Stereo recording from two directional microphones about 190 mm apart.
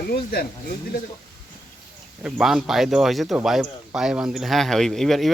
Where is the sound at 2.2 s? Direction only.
5° right (ahead or behind).